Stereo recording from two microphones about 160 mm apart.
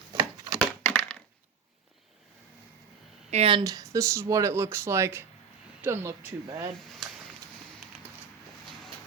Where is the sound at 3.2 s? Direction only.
40° right (ahead or behind).